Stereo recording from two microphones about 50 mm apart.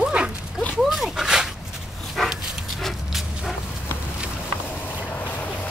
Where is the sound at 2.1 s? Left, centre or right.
Centre.